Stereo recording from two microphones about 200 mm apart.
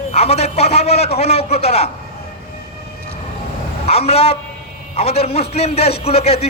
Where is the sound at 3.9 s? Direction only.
30° left (ahead or behind).